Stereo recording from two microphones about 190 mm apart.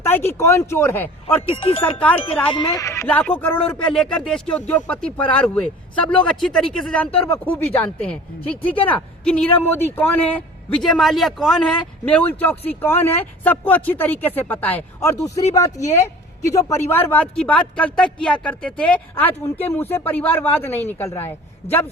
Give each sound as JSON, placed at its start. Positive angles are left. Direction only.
{"t": 0.0, "sound": "a man's voice", "side_deg": 10}
{"t": 1.5, "sound": "speech", "side_deg": 30}
{"t": 1.8, "sound": "a man's voice", "side_deg": 10}
{"t": 2.5, "sound": "a man's voice", "side_deg": 20}
{"t": 15.4, "sound": "speech", "side_deg": 35}
{"t": 16.5, "sound": "a man's voice", "side_deg": 15}